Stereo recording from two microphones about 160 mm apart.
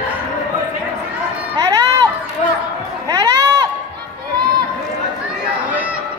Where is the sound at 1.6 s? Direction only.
20° right (ahead or behind).